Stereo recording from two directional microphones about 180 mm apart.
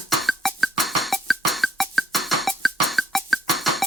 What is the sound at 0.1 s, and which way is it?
Music, centre (ahead or behind).